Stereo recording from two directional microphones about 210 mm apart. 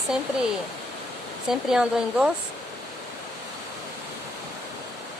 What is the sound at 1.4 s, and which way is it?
Speech, centre (ahead or behind).